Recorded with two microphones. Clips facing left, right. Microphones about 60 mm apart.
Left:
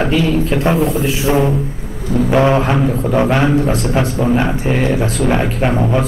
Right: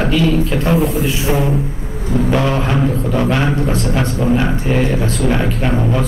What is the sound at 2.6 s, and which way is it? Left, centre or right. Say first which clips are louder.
Speech: left 2 dB; centre.